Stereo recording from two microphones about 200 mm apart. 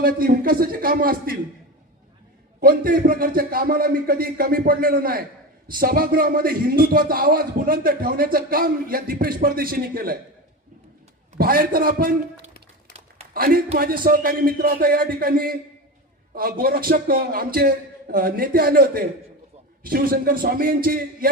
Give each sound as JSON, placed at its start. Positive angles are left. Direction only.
{"t": 0.0, "sound": "speech", "side_deg": -45}
{"t": 2.6, "sound": "speech", "side_deg": -45}
{"t": 11.3, "sound": "speech", "side_deg": -45}
{"t": 13.3, "sound": "a man's voice", "side_deg": -50}